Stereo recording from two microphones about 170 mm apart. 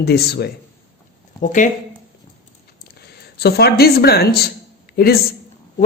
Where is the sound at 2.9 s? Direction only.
70° left (ahead or behind).